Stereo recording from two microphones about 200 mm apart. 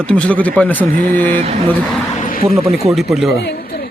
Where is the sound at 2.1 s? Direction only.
40° left (ahead or behind).